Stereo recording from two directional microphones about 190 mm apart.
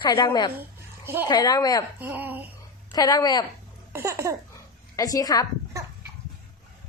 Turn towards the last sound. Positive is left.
turn(degrees=20)  # may be behind; listen again after turning